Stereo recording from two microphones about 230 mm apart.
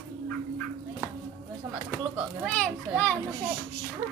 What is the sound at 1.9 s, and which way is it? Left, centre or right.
Speech, centre.